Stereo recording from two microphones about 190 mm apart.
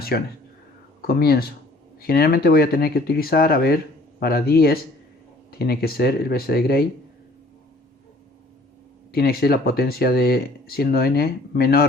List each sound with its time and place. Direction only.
0.1 s speech: 55° left (ahead or behind)
9.1 s speech: 55° left (ahead or behind)